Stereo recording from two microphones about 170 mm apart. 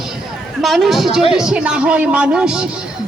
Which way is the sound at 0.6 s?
Centre (ahead or behind).